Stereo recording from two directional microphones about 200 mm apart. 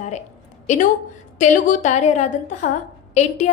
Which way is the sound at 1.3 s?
40° left (ahead or behind).